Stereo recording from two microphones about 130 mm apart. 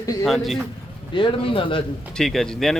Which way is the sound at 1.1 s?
40° left (ahead or behind).